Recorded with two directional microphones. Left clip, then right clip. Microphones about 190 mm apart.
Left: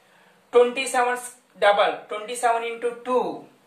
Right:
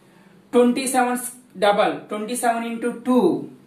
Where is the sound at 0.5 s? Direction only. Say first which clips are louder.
Right 1 dB; 20° left (ahead or behind).